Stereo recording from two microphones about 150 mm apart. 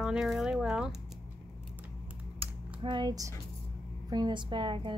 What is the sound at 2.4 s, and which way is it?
Typing, 35° right (ahead or behind).